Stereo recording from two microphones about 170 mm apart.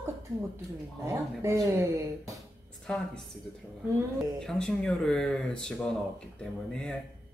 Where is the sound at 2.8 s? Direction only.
5° left (ahead or behind).